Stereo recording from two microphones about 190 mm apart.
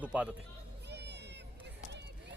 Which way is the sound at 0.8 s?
65° right (ahead or behind).